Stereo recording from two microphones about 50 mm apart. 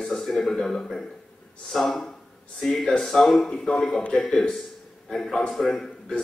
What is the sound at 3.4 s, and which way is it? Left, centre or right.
Speech, centre.